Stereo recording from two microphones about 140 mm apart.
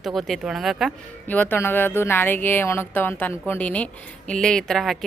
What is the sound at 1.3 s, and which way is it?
Speech, 15° left (ahead or behind).